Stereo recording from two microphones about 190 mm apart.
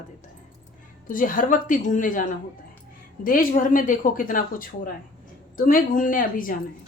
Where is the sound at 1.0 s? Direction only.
45° left (ahead or behind).